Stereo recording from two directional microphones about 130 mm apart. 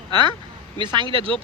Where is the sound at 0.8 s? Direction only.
35° right (ahead or behind).